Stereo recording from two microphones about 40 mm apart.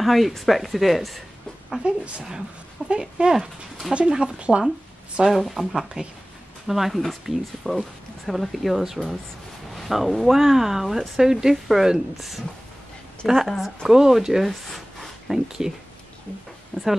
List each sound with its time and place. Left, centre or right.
0.0 s a woman's voice: centre
1.8 s speech: right
5.3 s a woman's voice: centre
7.7 s speech: centre
8.3 s a woman's voice: centre
14.5 s a woman's voice: centre
15.4 s speech: centre
16.7 s speech: centre